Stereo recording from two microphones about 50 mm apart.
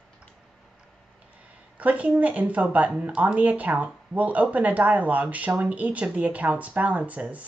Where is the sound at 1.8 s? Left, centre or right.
Right.